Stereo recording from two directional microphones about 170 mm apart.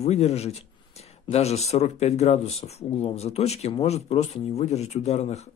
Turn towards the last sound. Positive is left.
turn(degrees=40)  # may be behind; listen again after turning